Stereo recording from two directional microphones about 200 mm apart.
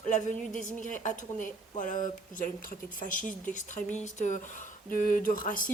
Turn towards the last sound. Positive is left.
turn(degrees=45)  # may be behind; listen again after turning